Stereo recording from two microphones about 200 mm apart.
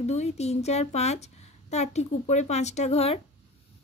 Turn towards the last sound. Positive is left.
turn(degrees=30)  # may be behind; listen again after turning